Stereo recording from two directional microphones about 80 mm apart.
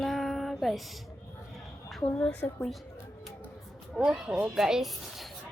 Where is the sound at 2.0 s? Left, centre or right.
Centre.